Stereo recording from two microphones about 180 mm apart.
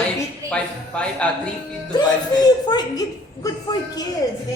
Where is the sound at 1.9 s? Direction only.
25° left (ahead or behind).